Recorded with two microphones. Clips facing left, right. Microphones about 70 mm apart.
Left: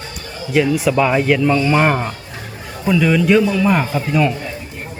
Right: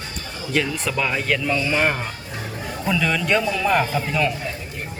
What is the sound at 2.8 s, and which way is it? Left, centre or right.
Speech, centre.